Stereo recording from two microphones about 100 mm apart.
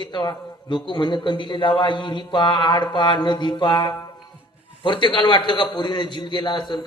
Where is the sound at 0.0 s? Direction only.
50° left (ahead or behind).